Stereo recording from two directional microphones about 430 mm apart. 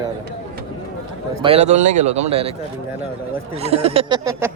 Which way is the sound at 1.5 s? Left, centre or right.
Centre.